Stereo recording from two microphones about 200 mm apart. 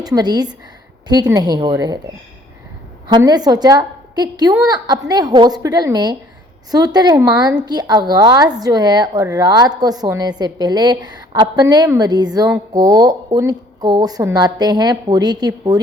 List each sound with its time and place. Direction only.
0.0 s a woman's voice: 20° right (ahead or behind)
3.1 s a woman's voice: 20° right (ahead or behind)